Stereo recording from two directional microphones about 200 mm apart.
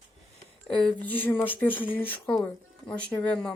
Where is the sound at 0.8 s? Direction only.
10° left (ahead or behind).